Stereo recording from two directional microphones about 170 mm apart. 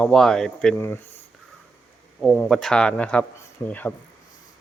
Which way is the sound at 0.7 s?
15° left (ahead or behind).